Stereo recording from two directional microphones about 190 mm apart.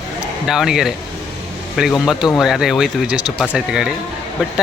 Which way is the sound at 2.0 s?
Centre (ahead or behind).